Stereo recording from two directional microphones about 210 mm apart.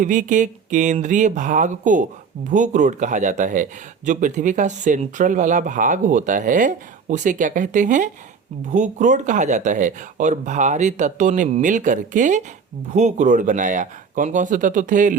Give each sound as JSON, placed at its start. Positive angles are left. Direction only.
{"t": 0.0, "sound": "speech", "side_deg": -40}